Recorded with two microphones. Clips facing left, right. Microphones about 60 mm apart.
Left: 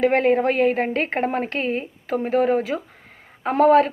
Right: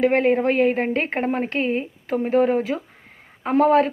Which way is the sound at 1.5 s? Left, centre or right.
Centre.